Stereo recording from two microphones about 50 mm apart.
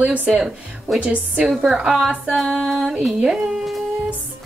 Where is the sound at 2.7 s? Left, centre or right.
Centre.